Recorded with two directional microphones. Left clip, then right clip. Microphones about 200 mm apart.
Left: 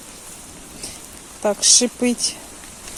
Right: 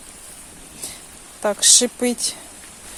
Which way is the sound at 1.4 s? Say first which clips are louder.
Even; 15° right (ahead or behind).